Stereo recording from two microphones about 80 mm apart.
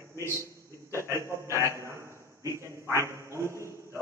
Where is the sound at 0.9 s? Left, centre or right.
Right.